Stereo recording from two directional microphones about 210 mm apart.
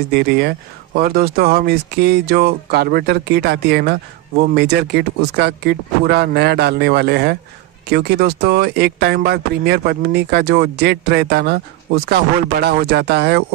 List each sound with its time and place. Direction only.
0.1 s speech: 50° right (ahead or behind)